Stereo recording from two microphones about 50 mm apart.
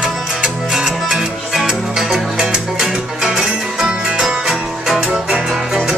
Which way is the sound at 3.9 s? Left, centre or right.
Right.